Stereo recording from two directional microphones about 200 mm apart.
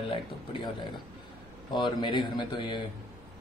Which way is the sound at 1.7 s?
20° left (ahead or behind).